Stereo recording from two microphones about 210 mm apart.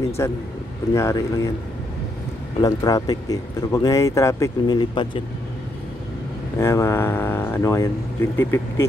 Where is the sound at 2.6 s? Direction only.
15° left (ahead or behind).